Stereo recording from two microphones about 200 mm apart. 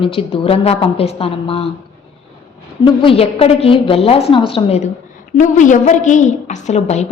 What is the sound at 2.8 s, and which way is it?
A woman's voice, 25° left (ahead or behind).